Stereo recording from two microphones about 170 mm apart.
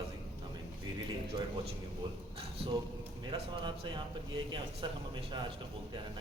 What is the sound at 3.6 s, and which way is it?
Speech, 30° right (ahead or behind).